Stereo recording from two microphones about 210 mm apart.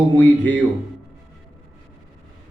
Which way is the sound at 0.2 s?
10° left (ahead or behind).